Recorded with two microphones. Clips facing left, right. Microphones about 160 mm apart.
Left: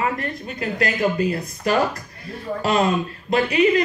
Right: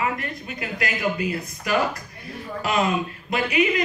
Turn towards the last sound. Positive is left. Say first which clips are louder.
# left 4 dB
turn(degrees=40)  # may be behind; listen again after turning